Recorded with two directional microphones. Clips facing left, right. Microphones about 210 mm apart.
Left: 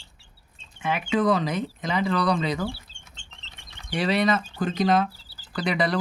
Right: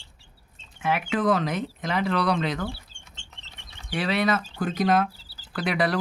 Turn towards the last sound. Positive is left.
turn(degrees=-5)  # may be behind; listen again after turning